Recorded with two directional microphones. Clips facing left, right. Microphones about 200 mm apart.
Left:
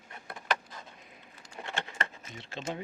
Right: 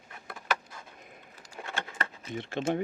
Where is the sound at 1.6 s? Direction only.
Centre (ahead or behind).